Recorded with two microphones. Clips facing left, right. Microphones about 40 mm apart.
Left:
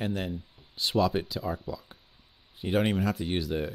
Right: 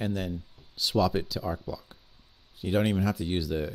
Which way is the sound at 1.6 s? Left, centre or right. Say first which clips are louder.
Even; centre.